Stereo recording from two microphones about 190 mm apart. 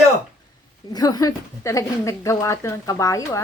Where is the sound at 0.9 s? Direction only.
20° left (ahead or behind).